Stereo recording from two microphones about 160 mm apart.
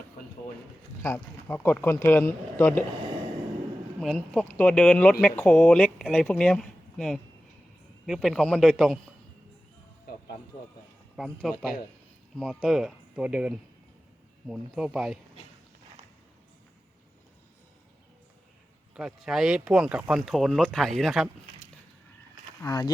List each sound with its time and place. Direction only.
1.0 s speech: 10° left (ahead or behind)
4.0 s speech: 5° left (ahead or behind)
10.1 s music: 70° left (ahead or behind)
11.2 s speech: centre (ahead or behind)
12.4 s speech: centre (ahead or behind)
18.9 s speech: 5° right (ahead or behind)
22.6 s speech: 20° left (ahead or behind)